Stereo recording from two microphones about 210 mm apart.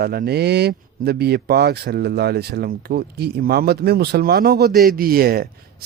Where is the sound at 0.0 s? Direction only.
45° right (ahead or behind).